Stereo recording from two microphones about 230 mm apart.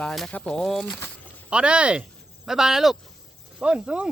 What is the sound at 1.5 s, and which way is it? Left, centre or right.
Speech, centre.